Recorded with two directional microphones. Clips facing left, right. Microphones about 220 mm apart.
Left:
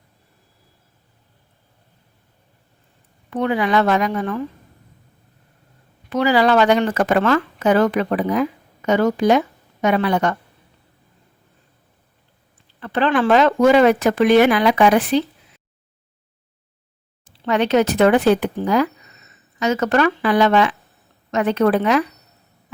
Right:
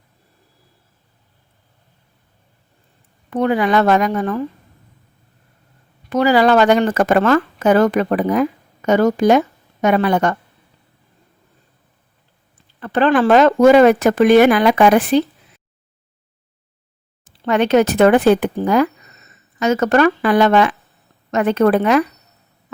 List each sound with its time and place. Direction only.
3.2 s speech: 45° right (ahead or behind)
6.1 s speech: 45° right (ahead or behind)
12.8 s speech: 45° right (ahead or behind)
17.2 s speech: 50° right (ahead or behind)